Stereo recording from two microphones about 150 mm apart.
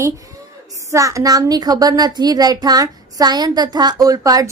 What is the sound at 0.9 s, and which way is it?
A child's voice, 20° right (ahead or behind).